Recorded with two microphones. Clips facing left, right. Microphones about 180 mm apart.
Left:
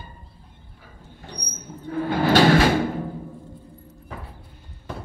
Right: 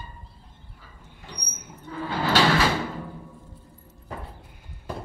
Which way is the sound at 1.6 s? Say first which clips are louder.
Left 7 dB; 50° left (ahead or behind).